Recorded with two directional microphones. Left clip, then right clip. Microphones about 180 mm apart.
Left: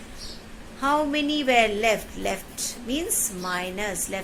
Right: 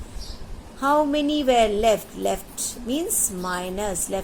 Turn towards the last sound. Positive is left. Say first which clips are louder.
# right 2 dB
turn(degrees=-70)  # may be behind; listen again after turning